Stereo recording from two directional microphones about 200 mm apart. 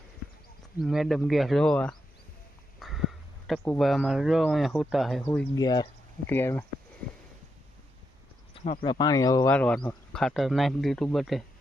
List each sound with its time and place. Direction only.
0.8 s speech: centre (ahead or behind)
5.5 s speech: 20° left (ahead or behind)
8.5 s speech: 30° left (ahead or behind)
9.6 s speech: 5° left (ahead or behind)